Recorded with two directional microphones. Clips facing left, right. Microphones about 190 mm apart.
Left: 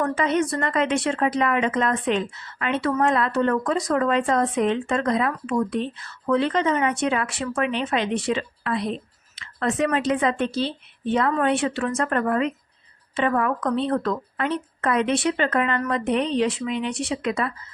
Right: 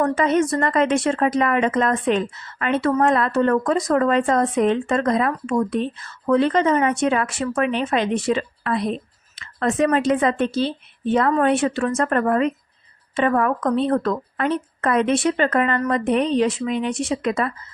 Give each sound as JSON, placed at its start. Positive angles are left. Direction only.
{"t": 0.0, "sound": "speech", "side_deg": -45}